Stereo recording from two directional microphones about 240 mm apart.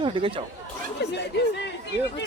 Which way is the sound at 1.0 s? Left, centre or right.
Left.